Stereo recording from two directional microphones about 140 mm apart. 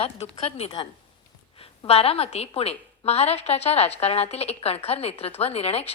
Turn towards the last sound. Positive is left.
turn(degrees=45)  # may be behind; listen again after turning